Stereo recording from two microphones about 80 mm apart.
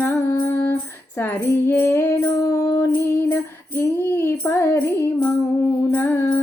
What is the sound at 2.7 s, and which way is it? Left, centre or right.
Music, left.